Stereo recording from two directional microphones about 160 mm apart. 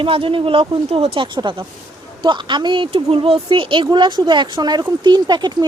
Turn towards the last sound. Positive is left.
turn(degrees=-25)  # may be behind; listen again after turning